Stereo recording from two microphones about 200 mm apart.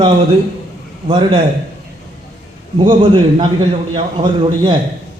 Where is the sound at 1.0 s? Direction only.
25° right (ahead or behind).